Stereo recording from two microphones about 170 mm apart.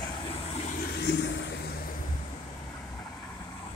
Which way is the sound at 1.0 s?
90° left.